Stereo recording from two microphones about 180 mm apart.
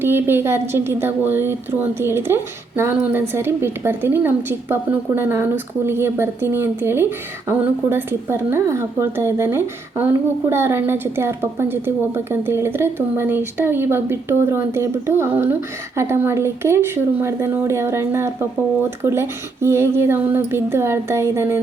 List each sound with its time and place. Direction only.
0.0 s a woman's voice: 10° right (ahead or behind)